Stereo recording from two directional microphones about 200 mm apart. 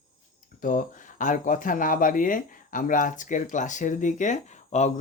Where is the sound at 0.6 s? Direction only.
40° left (ahead or behind).